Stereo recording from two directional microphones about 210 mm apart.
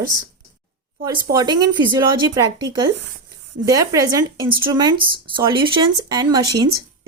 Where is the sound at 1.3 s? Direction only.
20° right (ahead or behind).